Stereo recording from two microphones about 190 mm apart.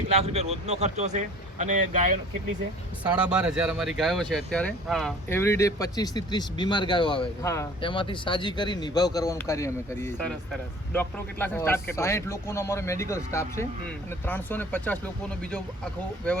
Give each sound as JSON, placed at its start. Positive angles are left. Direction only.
{"t": 0.1, "sound": "speech", "side_deg": -35}
{"t": 3.0, "sound": "speech", "side_deg": -5}
{"t": 5.3, "sound": "speech", "side_deg": 15}
{"t": 7.4, "sound": "speech", "side_deg": 15}
{"t": 7.8, "sound": "speech", "side_deg": 25}